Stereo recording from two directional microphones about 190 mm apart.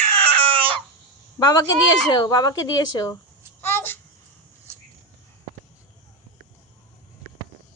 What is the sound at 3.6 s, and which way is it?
Babbling, 10° left (ahead or behind).